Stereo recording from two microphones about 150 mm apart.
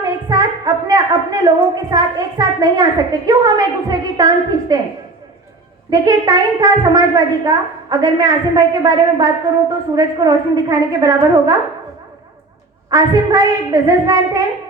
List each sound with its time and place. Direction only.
0.3 s a woman's voice: 25° right (ahead or behind)
5.9 s a woman's voice: 25° right (ahead or behind)
12.9 s a woman's voice: 25° right (ahead or behind)